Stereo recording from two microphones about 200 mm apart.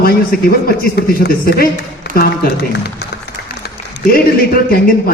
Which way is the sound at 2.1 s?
50° left (ahead or behind).